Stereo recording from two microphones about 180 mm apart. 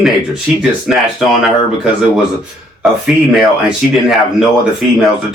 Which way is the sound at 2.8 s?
Centre (ahead or behind).